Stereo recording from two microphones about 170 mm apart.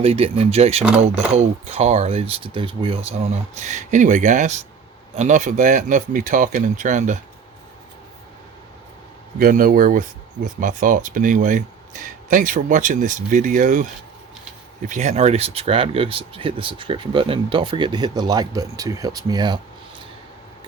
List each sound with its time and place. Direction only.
0.0 s speech: 35° right (ahead or behind)
9.4 s speech: 55° right (ahead or behind); by 19.5 s 25° right (ahead or behind)